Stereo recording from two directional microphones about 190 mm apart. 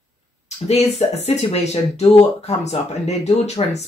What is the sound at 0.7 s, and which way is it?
Speech, 35° left (ahead or behind).